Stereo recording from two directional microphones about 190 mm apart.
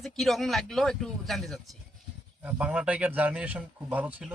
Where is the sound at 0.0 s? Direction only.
Centre (ahead or behind).